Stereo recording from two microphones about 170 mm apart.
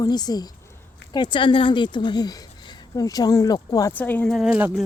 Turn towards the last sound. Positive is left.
turn(degrees=-10)  # may be behind; listen again after turning